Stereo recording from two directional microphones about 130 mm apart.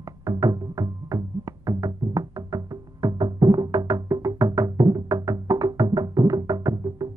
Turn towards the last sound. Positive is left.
turn(degrees=-25)  # may be behind; listen again after turning